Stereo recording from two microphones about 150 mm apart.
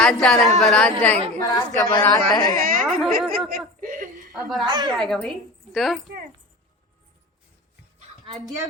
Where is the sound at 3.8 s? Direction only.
65° right (ahead or behind).